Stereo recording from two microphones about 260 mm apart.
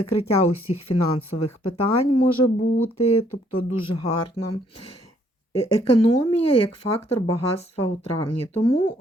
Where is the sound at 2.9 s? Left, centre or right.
Left.